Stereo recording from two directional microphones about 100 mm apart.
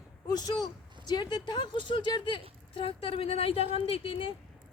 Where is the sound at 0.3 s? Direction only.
40° left (ahead or behind).